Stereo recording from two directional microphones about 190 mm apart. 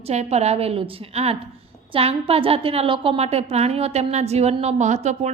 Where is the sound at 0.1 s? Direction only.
35° right (ahead or behind).